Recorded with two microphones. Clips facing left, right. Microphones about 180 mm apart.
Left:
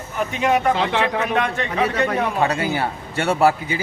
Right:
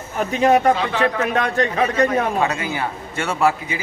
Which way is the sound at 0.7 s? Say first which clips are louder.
Left 1 dB; 70° left (ahead or behind).